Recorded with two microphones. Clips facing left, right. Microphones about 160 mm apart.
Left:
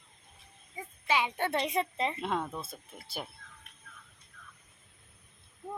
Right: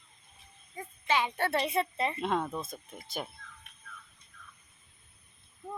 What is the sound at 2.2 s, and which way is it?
Speech, centre (ahead or behind).